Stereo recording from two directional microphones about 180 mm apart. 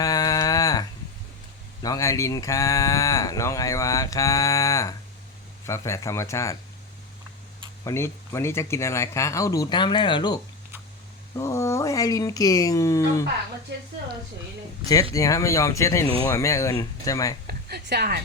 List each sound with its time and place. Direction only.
0.0 s a sound: 20° left (ahead or behind)
1.8 s speech: 20° left (ahead or behind)
7.9 s speech: 15° left (ahead or behind)
13.7 s speech: 70° right (ahead or behind)
15.1 s speech: 20° left (ahead or behind)
17.4 s a woman's voice: 65° right (ahead or behind)